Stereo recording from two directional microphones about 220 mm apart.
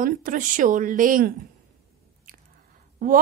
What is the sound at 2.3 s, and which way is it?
Squish, 40° right (ahead or behind).